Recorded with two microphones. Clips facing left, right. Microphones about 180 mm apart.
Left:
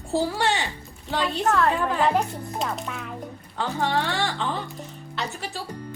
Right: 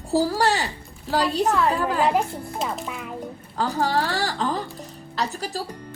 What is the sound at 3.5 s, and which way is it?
Speech, 35° right (ahead or behind).